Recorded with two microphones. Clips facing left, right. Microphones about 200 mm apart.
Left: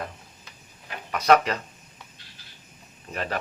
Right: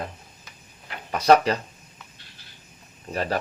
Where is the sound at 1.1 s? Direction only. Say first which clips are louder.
Right 2 dB; 30° right (ahead or behind).